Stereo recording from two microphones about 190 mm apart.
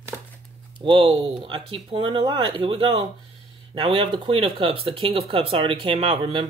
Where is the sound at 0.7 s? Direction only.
25° right (ahead or behind).